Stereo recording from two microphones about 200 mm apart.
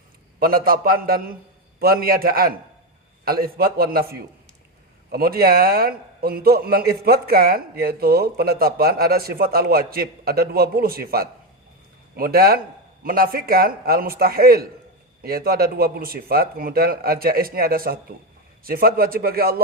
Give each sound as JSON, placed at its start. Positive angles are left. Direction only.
{"t": 0.3, "sound": "a man's voice", "side_deg": -50}